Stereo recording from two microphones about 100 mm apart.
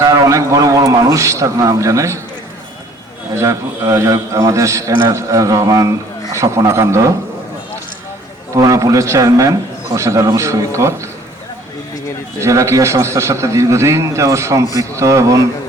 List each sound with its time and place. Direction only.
0.0 s a man's voice: 35° right (ahead or behind)
3.3 s a man's voice: 35° right (ahead or behind)
8.5 s a man's voice: 35° right (ahead or behind)
12.4 s a man's voice: 30° right (ahead or behind)